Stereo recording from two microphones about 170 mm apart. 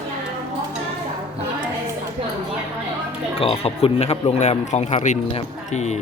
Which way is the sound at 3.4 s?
35° left (ahead or behind).